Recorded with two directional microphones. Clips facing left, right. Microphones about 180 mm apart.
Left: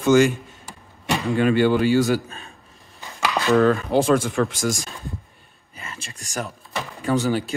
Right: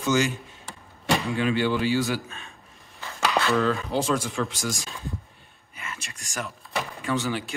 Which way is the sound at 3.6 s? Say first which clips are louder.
Left 7 dB; 55° left (ahead or behind).